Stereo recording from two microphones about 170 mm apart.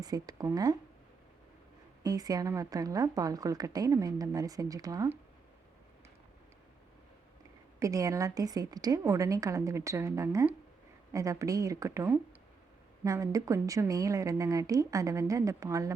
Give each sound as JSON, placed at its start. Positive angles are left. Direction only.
{"t": 0.0, "sound": "a woman's voice", "side_deg": -20}
{"t": 2.0, "sound": "a woman's voice", "side_deg": -20}
{"t": 7.8, "sound": "a woman's voice", "side_deg": -20}